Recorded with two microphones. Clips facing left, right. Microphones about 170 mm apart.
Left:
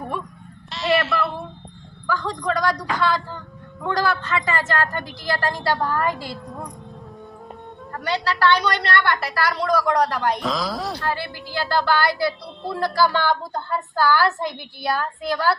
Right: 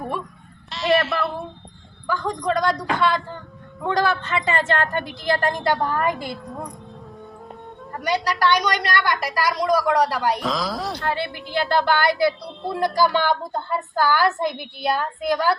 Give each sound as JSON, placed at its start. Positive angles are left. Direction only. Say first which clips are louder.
{"t": 0.7, "sound": "a sound", "louder": "right 1 dB", "side_deg": 0}
{"t": 2.0, "sound": "a woman's voice", "louder": "right 1 dB", "side_deg": -20}
{"t": 7.9, "sound": "a woman's voice", "louder": "right 1 dB", "side_deg": -15}
{"t": 11.0, "sound": "a woman's voice", "louder": "right 1 dB", "side_deg": -20}